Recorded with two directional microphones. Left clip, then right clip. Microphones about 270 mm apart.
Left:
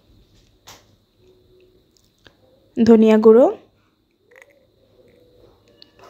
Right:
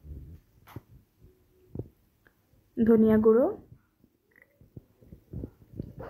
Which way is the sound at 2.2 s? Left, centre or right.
Left.